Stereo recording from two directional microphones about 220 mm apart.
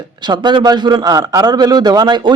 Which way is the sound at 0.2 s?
20° right (ahead or behind).